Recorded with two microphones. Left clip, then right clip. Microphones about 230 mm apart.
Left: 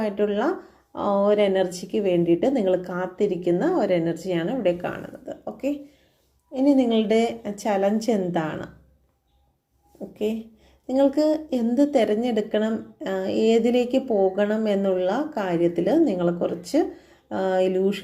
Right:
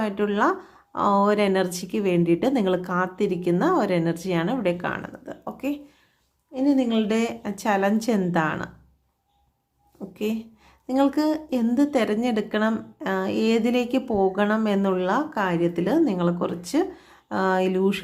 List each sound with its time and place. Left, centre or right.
0.0 s a woman's voice: centre
10.2 s a woman's voice: centre